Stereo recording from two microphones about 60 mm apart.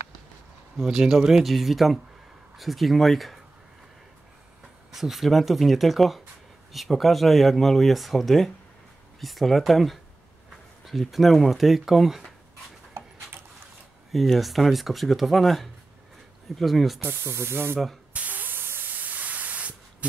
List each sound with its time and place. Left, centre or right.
0.8 s speech: centre
4.9 s speech: centre
14.1 s speech: centre
17.0 s speech: right
18.1 s spray: right